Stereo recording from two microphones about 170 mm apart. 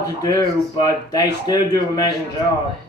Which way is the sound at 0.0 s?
20° left (ahead or behind).